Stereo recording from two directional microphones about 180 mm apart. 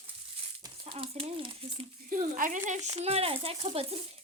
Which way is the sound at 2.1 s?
50° right (ahead or behind).